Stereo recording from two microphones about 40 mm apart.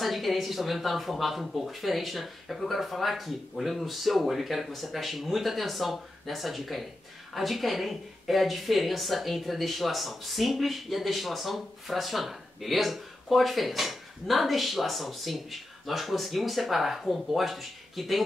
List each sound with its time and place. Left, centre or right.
0.0 s speech: centre